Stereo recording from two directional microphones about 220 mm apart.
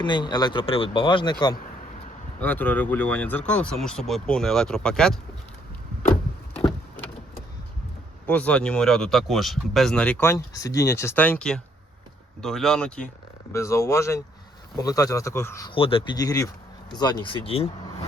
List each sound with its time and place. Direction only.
0.0 s speech: 20° left (ahead or behind)
2.4 s speech: 10° left (ahead or behind)
8.3 s speech: 5° left (ahead or behind); by 17.7 s 25° left (ahead or behind)